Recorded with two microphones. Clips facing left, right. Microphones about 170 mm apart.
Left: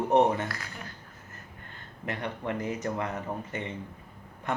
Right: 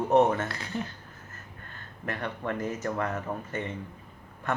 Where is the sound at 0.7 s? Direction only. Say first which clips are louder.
Right 10 dB; 25° right (ahead or behind).